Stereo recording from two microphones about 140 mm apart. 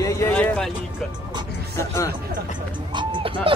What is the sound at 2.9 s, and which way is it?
Music, 35° right (ahead or behind).